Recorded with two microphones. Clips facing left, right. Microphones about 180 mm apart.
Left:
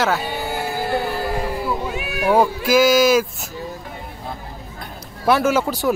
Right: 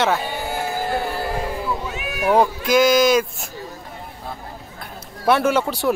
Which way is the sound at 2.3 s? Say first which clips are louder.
Left 1 dB; 5° left (ahead or behind).